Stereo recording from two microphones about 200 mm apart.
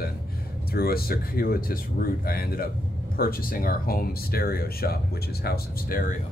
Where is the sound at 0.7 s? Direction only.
50° left (ahead or behind).